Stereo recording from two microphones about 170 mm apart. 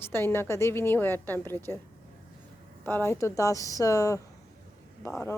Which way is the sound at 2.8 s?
15° left (ahead or behind).